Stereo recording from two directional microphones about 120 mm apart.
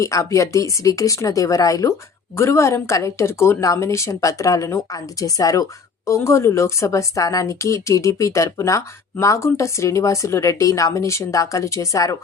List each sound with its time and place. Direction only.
0.0 s speech: 25° left (ahead or behind)